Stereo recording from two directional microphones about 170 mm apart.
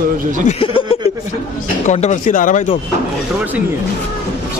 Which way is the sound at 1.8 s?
45° left (ahead or behind).